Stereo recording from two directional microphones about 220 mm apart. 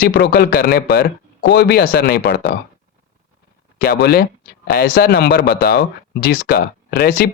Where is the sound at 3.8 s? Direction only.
45° left (ahead or behind).